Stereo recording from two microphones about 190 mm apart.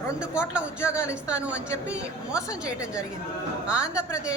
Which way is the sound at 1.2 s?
5° right (ahead or behind).